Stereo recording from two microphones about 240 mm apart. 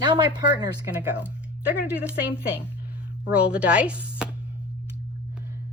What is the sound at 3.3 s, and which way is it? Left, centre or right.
Speech, centre.